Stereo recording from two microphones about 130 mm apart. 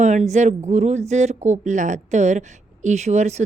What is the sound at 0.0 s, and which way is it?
A woman's voice, 65° right (ahead or behind).